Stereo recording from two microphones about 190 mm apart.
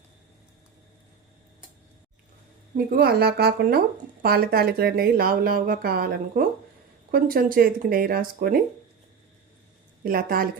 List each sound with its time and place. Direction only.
2.7 s speech: 55° right (ahead or behind)
10.0 s speech: 50° right (ahead or behind)